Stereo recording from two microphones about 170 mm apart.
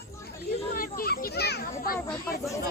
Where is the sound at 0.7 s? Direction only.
60° left (ahead or behind).